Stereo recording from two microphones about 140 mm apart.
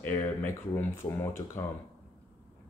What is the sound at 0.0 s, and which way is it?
Speech, 15° left (ahead or behind).